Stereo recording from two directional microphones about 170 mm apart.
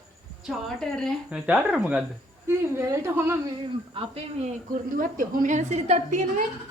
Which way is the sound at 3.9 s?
35° right (ahead or behind).